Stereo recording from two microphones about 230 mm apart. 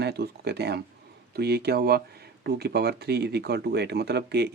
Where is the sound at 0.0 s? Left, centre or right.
Right.